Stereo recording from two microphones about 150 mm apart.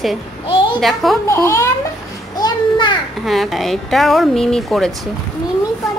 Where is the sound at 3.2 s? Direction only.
Centre (ahead or behind).